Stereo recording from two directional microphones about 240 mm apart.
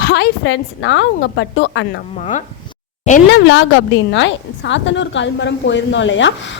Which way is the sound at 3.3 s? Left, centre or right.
Left.